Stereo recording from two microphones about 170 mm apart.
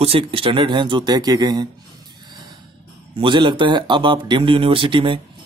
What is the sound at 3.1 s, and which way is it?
Speech, 30° right (ahead or behind).